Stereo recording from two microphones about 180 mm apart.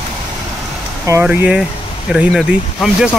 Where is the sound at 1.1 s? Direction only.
10° right (ahead or behind).